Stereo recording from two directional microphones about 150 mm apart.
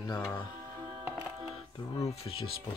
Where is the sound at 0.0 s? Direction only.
25° left (ahead or behind).